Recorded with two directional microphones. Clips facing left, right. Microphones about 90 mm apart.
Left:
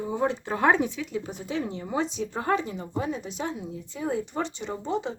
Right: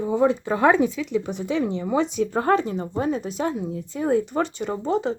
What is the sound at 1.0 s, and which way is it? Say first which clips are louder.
Speech: right 7 dB; 80° right.